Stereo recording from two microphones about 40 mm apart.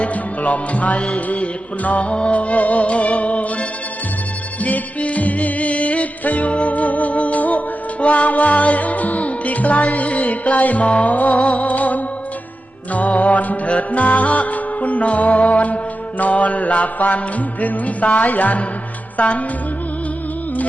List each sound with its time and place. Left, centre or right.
0.0 s music: left